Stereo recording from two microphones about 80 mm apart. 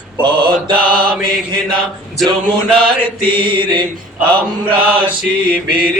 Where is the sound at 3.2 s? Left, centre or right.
Right.